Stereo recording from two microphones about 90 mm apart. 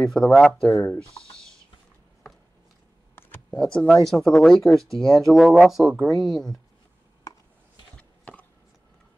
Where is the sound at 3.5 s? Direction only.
10° left (ahead or behind).